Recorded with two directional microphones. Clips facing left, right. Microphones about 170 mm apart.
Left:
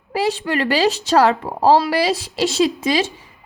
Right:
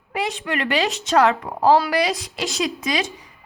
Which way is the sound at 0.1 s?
35° left (ahead or behind).